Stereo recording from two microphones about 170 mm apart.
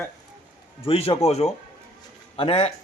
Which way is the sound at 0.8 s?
35° left (ahead or behind).